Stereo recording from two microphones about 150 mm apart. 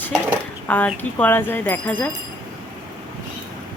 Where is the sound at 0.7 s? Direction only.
10° left (ahead or behind).